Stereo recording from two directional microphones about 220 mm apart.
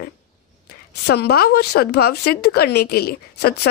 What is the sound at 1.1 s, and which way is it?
Speech, 50° left (ahead or behind).